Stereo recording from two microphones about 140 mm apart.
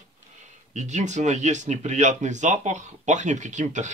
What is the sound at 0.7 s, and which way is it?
Speech, 55° right (ahead or behind).